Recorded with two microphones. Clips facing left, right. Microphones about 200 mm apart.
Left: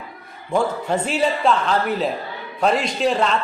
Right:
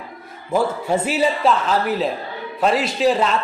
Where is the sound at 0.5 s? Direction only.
5° right (ahead or behind).